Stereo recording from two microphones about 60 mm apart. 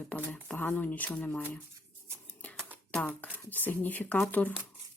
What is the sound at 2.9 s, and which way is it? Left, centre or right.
Speech, centre.